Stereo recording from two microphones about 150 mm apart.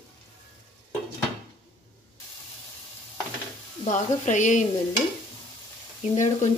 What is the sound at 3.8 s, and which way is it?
Speech, 55° left (ahead or behind).